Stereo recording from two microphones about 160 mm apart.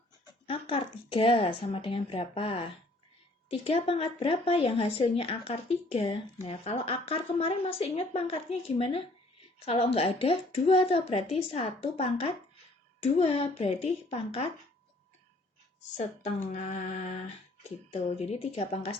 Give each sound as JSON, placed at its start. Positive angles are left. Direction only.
{"t": 0.4, "sound": "speech", "side_deg": 35}
{"t": 16.5, "sound": "a sound", "side_deg": 45}
{"t": 17.9, "sound": "speech", "side_deg": 40}